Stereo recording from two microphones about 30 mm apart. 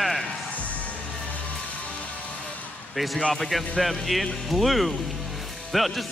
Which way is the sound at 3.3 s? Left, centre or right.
Centre.